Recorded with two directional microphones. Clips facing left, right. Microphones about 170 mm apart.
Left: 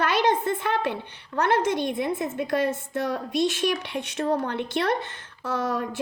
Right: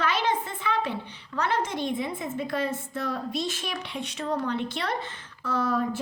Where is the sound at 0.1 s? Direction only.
70° left (ahead or behind).